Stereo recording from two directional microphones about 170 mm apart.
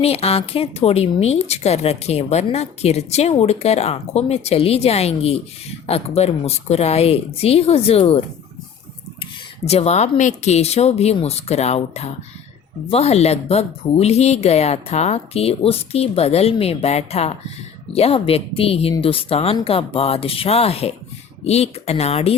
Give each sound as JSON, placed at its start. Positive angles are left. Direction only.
{"t": 0.0, "sound": "speech", "side_deg": 35}
{"t": 9.6, "sound": "speech", "side_deg": 40}